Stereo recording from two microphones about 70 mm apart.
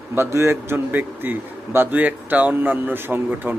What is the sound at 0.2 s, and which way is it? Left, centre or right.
Speech, right.